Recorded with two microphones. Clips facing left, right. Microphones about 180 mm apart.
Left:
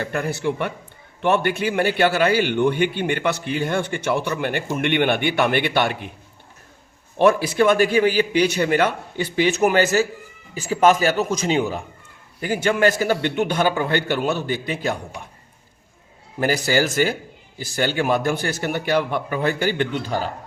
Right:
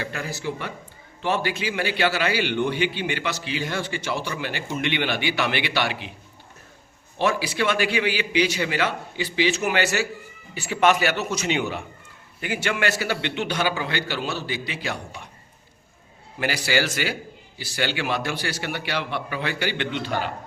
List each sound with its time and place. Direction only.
0.0 s a man's voice: 55° left (ahead or behind)
7.2 s a man's voice: 55° left (ahead or behind)
16.4 s a man's voice: 45° left (ahead or behind)